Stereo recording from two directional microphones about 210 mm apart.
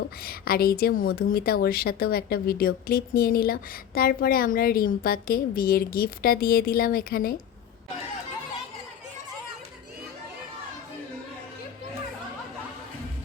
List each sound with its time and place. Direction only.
0.3 s a woman's voice: 45° left (ahead or behind)